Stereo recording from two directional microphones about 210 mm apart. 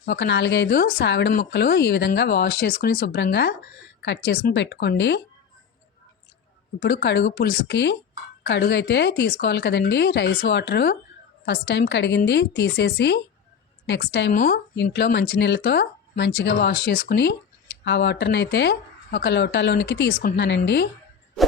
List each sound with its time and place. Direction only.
0.0 s speech: 55° left (ahead or behind)
1.3 s speech: 45° left (ahead or behind)
6.7 s speech: 55° left (ahead or behind)
14.8 s speech: 55° left (ahead or behind)